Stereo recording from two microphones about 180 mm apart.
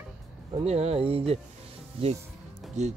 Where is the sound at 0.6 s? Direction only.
35° right (ahead or behind).